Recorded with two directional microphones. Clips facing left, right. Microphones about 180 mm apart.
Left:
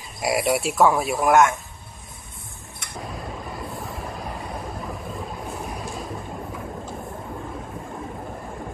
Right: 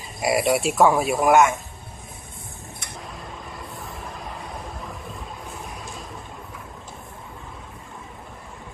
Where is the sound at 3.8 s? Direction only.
Centre (ahead or behind).